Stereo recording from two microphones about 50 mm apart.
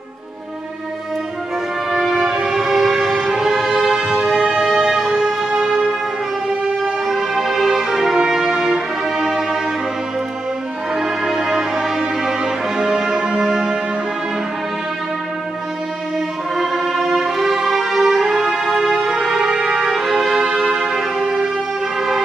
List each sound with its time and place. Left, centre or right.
1.9 s music: centre
11.0 s music: centre
16.5 s music: centre